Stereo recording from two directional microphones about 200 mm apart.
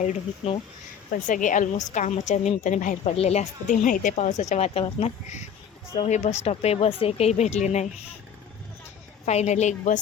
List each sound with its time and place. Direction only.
0.0 s a woman's voice: 35° left (ahead or behind)
9.2 s a woman's voice: 35° left (ahead or behind)